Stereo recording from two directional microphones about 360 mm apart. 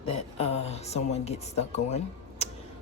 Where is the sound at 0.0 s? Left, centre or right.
Centre.